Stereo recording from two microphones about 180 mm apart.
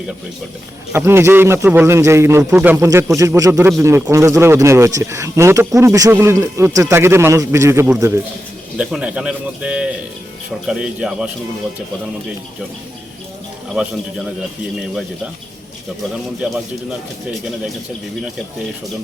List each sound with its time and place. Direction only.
0.9 s a man's voice: 15° right (ahead or behind)